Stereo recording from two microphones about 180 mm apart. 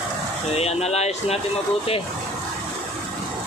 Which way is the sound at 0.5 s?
35° left (ahead or behind).